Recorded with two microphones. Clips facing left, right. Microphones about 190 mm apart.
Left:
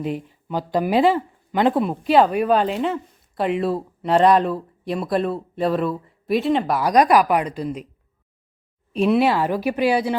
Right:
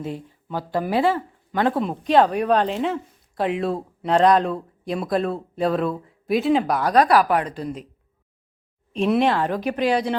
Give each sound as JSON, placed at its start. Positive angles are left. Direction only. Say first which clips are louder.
{"t": 0.0, "sound": "speech", "louder": "left 4 dB", "side_deg": 15}
{"t": 1.9, "sound": "a woman's voice", "louder": "left 1 dB", "side_deg": 5}
{"t": 6.9, "sound": "speech", "louder": "left 1 dB", "side_deg": 15}
{"t": 8.9, "sound": "speech", "louder": "left 2 dB", "side_deg": 5}